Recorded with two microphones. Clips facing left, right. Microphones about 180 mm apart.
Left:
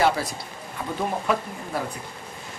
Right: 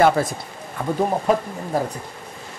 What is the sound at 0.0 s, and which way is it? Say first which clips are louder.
Speech: right 6 dB; 50° right (ahead or behind).